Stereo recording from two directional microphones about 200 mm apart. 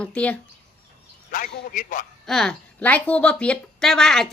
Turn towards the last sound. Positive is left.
turn(degrees=0)  # may be behind; listen again after turning